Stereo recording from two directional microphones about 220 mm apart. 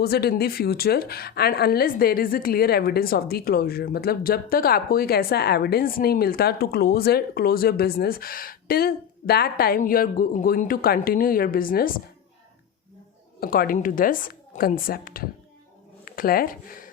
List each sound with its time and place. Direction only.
0.0 s speech: 45° left (ahead or behind)
13.4 s a woman's voice: 40° left (ahead or behind)